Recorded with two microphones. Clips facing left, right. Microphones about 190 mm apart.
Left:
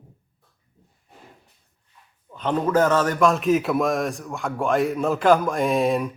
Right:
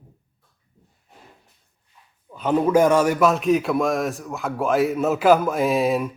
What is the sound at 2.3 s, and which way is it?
A man's voice, 10° right (ahead or behind).